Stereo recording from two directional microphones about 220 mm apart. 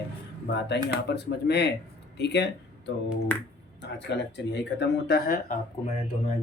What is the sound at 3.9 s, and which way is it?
Speech, 50° left (ahead or behind).